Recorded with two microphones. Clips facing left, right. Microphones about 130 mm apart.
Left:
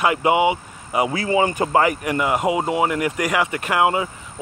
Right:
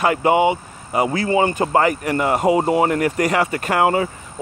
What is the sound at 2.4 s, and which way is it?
Speech, 10° left (ahead or behind).